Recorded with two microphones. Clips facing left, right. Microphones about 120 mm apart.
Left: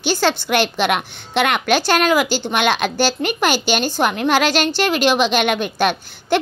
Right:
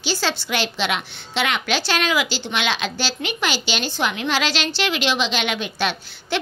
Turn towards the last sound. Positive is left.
turn(degrees=50)  # may be behind; listen again after turning